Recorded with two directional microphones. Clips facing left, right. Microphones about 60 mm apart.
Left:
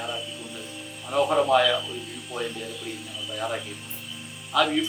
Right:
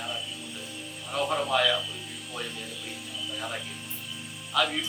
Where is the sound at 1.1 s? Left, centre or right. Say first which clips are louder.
Left 6 dB; centre.